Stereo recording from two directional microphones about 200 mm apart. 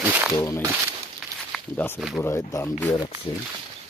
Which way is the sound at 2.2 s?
15° left (ahead or behind).